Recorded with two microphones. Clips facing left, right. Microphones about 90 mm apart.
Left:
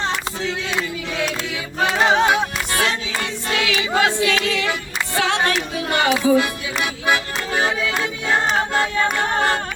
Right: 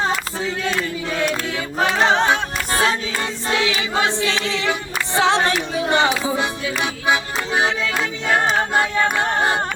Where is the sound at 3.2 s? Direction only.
30° right (ahead or behind).